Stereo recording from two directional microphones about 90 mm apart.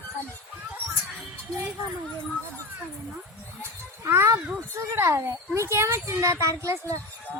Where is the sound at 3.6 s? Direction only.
30° right (ahead or behind).